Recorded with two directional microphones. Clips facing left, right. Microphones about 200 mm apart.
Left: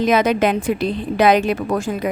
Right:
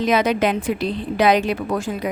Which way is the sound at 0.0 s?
50° left (ahead or behind).